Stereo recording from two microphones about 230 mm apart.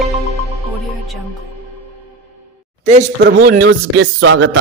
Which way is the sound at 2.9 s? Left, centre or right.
Right.